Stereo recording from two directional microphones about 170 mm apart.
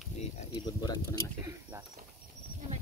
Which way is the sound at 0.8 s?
25° left (ahead or behind).